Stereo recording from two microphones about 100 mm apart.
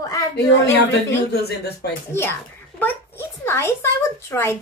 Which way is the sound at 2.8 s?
20° left (ahead or behind).